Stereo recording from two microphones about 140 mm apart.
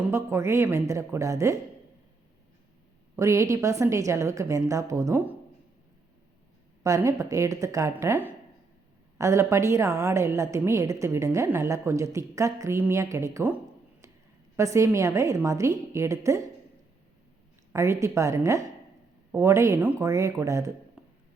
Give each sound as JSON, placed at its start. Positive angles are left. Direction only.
{"t": 0.1, "sound": "a woman's voice", "side_deg": -20}
{"t": 3.2, "sound": "a woman's voice", "side_deg": -20}
{"t": 6.8, "sound": "a woman's voice", "side_deg": -25}
{"t": 14.5, "sound": "a woman's voice", "side_deg": -20}
{"t": 17.7, "sound": "a woman's voice", "side_deg": -20}